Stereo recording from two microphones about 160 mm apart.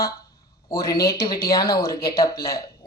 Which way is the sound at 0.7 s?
20° left (ahead or behind).